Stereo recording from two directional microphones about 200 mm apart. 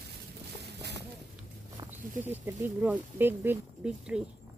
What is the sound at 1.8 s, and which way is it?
Speech, 10° right (ahead or behind).